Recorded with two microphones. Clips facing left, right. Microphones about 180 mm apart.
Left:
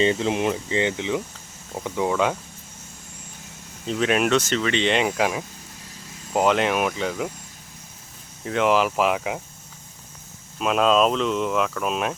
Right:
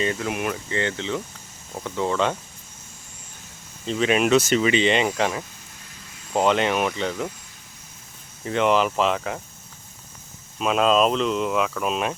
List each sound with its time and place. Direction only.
0.0 s speech: 25° left (ahead or behind); by 2.4 s 5° left (ahead or behind)
3.8 s speech: centre (ahead or behind)
8.4 s speech: centre (ahead or behind)
10.6 s speech: centre (ahead or behind)